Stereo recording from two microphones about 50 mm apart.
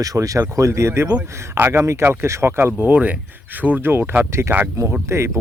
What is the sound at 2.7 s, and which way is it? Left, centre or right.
Speech, right.